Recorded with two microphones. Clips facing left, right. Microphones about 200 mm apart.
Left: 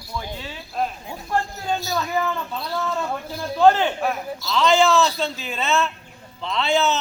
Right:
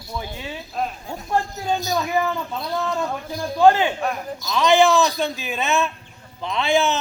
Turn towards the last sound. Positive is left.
turn(degrees=-15)  # may be behind; listen again after turning